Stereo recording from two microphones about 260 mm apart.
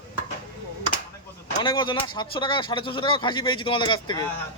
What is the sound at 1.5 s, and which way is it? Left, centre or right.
Speech, centre.